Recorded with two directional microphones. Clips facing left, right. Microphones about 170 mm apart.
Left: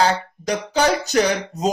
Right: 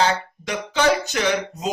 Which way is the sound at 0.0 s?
40° left (ahead or behind).